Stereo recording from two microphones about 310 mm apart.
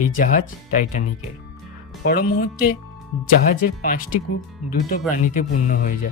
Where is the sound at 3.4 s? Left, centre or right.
Left.